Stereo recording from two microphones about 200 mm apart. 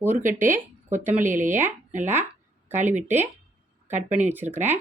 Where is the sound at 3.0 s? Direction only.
10° right (ahead or behind).